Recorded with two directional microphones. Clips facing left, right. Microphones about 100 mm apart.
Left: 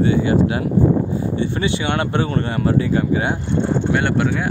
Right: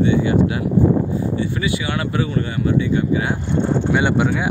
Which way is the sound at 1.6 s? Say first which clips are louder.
Left 2 dB; 30° left (ahead or behind).